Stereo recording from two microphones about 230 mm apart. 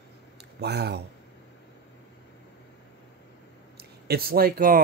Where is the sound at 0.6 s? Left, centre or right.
Right.